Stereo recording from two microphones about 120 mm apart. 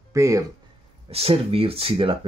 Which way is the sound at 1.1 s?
55° right (ahead or behind).